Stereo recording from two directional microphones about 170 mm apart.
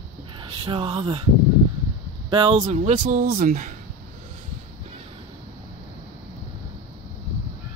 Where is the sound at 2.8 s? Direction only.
45° right (ahead or behind).